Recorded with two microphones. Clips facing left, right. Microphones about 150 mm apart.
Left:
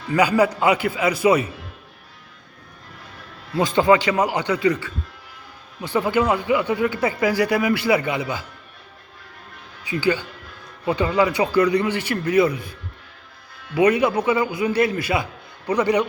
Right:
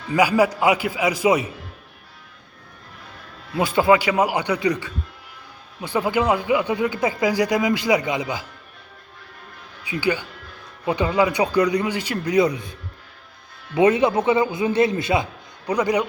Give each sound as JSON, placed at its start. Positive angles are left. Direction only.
{"t": 0.1, "sound": "speech", "side_deg": -10}
{"t": 3.5, "sound": "speech", "side_deg": -10}
{"t": 9.8, "sound": "speech", "side_deg": -15}
{"t": 13.7, "sound": "a man's voice", "side_deg": -20}